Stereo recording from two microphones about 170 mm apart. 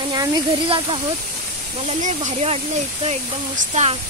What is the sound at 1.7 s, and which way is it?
Speech, 45° right (ahead or behind).